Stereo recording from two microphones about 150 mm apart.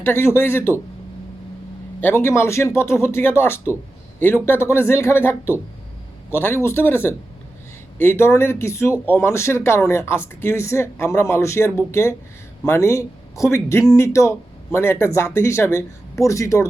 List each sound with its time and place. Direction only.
0.0 s speech: 15° left (ahead or behind)
2.0 s speech: 15° left (ahead or behind)